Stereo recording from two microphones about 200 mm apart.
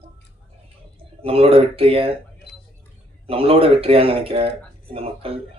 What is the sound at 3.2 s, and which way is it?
Speech, 30° right (ahead or behind).